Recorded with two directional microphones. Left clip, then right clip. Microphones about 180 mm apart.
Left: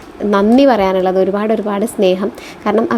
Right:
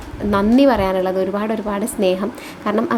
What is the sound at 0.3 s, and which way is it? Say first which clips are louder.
A woman's voice: left 4 dB; 20° left (ahead or behind).